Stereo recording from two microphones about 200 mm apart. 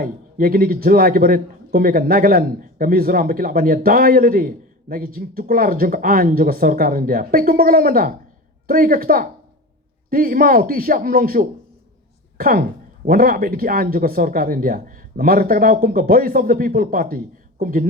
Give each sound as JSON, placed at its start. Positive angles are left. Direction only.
{"t": 0.0, "sound": "a man's voice", "side_deg": -45}